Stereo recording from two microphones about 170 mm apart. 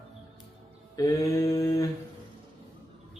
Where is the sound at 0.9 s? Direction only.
20° left (ahead or behind).